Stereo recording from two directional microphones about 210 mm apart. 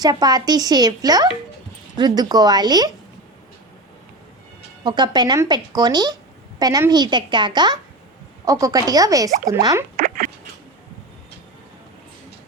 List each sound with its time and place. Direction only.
0.0 s speech: 20° right (ahead or behind)
4.8 s speech: 20° right (ahead or behind)
10.0 s a sound: 40° right (ahead or behind)